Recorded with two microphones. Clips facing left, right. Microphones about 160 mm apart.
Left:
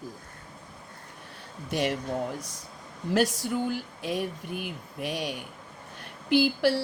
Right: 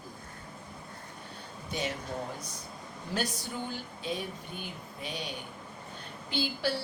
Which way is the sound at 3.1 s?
90° left.